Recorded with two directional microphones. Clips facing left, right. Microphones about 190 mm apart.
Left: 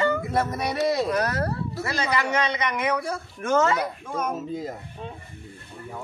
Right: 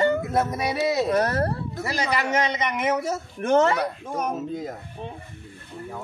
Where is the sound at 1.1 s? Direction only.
25° right (ahead or behind).